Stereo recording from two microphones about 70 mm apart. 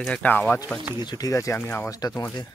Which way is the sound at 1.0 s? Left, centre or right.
Left.